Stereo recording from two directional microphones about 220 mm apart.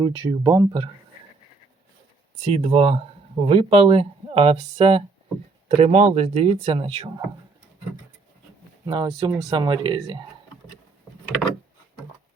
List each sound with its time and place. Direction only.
0.0 s speech: 15° right (ahead or behind)
2.4 s speech: 25° right (ahead or behind)
8.9 s speech: 20° right (ahead or behind)